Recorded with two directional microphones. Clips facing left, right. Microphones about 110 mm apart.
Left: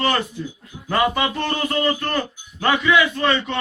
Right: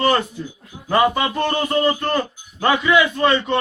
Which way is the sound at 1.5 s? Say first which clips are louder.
Right 3 dB; 20° right (ahead or behind).